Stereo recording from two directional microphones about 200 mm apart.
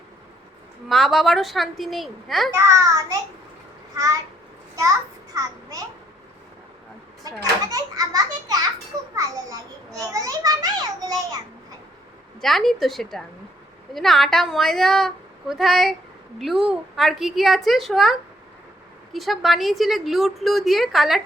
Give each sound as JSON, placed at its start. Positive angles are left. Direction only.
{"t": 0.9, "sound": "a woman's voice", "side_deg": 0}
{"t": 2.6, "sound": "a child's voice", "side_deg": -15}
{"t": 7.7, "sound": "a child's voice", "side_deg": -15}
{"t": 12.4, "sound": "a woman's voice", "side_deg": 0}